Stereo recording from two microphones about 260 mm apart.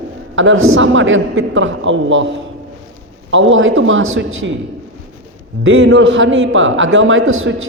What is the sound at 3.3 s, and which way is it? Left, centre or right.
Speech, right.